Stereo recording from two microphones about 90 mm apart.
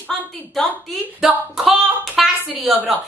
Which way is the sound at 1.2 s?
5° right (ahead or behind).